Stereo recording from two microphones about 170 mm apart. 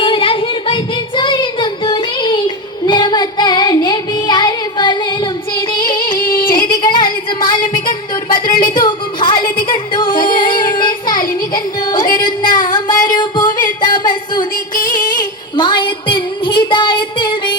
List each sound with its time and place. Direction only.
0.0 s child singing: 30° left (ahead or behind)
5.7 s music: 25° left (ahead or behind)
6.1 s music: 55° left (ahead or behind)
6.7 s music: 25° left (ahead or behind)
8.6 s a sound: 30° left (ahead or behind)
9.6 s singing: 30° left (ahead or behind)
10.6 s music: 25° left (ahead or behind)
13.8 s a sound: 25° left (ahead or behind)